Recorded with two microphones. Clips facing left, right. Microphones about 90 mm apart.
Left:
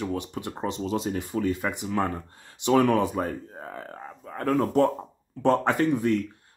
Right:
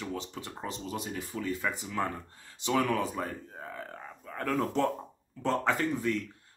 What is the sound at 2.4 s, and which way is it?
Speech, 65° left (ahead or behind).